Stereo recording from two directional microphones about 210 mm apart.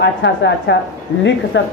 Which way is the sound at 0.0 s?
55° left (ahead or behind).